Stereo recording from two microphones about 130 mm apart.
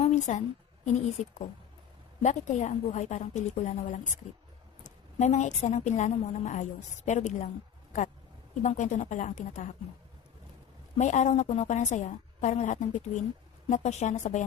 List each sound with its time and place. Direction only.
0.0 s a sound: 65° left (ahead or behind)
0.9 s a woman's voice: 65° left (ahead or behind)
8.6 s a woman's voice: 70° left (ahead or behind)
10.9 s a woman's voice: 65° left (ahead or behind)